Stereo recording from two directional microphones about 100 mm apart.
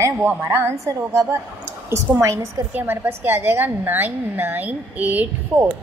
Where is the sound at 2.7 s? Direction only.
20° right (ahead or behind).